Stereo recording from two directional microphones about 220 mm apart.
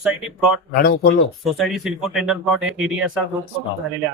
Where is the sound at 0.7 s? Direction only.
45° left (ahead or behind).